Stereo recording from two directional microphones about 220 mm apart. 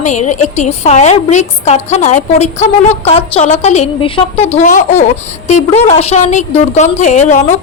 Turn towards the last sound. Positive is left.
turn(degrees=35)  # may be behind; listen again after turning